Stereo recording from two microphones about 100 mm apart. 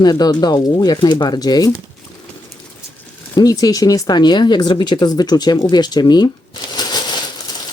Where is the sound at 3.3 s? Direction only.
40° left (ahead or behind).